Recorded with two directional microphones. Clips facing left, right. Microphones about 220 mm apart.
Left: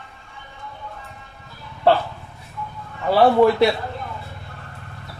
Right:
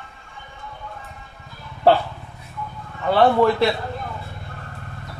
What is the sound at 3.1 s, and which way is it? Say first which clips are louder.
Speech: left 2 dB; 10° left (ahead or behind).